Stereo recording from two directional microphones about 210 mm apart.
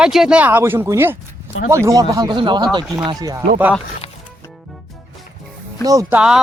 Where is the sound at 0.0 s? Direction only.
5° right (ahead or behind).